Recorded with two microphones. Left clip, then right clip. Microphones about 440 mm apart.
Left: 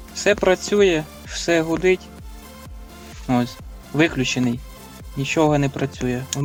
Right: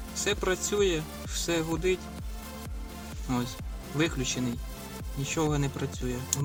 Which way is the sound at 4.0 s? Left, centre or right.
Left.